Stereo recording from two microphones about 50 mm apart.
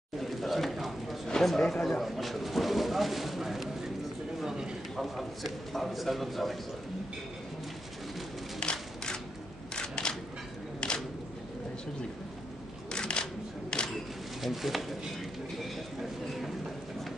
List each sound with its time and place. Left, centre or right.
0.2 s a man's voice: centre
4.9 s speech: centre
8.5 s a sound: centre
9.8 s single-lens reflex camera: centre
12.9 s camera: centre
14.4 s speech: centre